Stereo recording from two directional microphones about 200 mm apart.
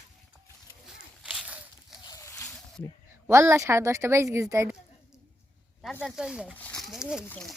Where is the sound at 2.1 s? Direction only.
15° left (ahead or behind).